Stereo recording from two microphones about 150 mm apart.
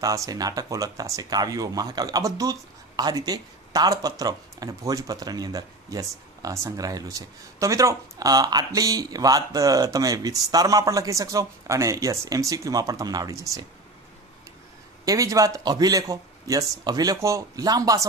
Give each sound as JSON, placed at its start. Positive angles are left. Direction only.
{"t": 0.0, "sound": "speech", "side_deg": -20}
{"t": 15.0, "sound": "speech", "side_deg": -20}